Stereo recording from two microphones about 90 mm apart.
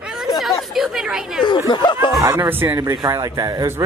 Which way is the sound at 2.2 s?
30° right (ahead or behind).